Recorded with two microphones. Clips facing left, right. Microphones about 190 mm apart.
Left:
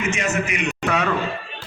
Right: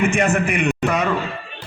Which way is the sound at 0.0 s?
55° right (ahead or behind).